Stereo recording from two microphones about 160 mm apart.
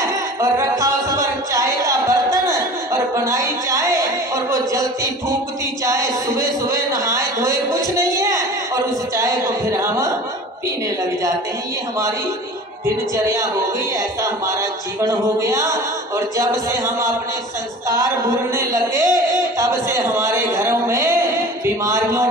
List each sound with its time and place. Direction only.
0.0 s music: 20° right (ahead or behind)
0.7 s a sound: 20° right (ahead or behind)
5.9 s a man's voice: 20° right (ahead or behind)
13.9 s speech: 20° right (ahead or behind)
17.9 s a sound: 25° left (ahead or behind)
18.9 s speech: 25° left (ahead or behind)
19.6 s speech: 15° right (ahead or behind)